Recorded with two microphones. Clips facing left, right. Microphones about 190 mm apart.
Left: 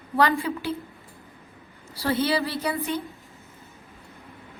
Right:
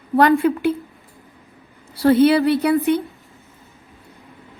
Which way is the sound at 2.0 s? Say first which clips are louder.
Right 11 dB; 55° right (ahead or behind).